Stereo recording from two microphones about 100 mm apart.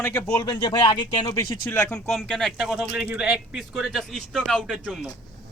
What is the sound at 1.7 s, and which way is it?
Speech, 20° left (ahead or behind).